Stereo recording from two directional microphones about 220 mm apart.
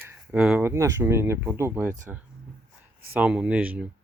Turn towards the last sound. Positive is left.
turn(degrees=-5)  # may be behind; listen again after turning